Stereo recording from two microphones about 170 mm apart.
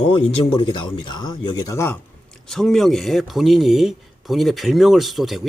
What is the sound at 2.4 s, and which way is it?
Speech, centre (ahead or behind).